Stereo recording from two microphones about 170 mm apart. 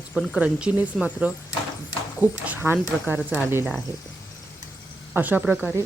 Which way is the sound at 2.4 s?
10° right (ahead or behind).